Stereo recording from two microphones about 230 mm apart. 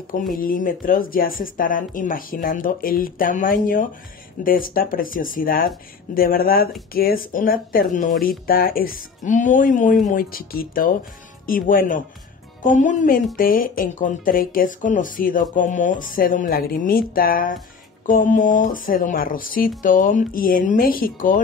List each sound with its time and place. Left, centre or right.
0.4 s speech: left